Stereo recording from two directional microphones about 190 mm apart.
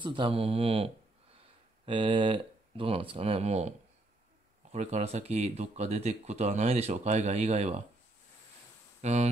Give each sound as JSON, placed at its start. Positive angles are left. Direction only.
{"t": 0.0, "sound": "speech", "side_deg": -25}
{"t": 9.0, "sound": "speech", "side_deg": -35}